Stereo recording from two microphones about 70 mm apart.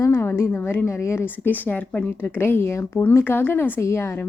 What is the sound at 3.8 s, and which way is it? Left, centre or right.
Speech, left.